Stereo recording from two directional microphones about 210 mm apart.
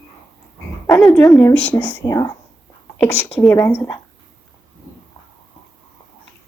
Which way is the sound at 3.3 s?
5° left (ahead or behind).